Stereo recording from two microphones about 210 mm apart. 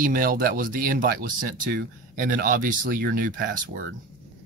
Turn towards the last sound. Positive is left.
turn(degrees=-40)  # may be behind; listen again after turning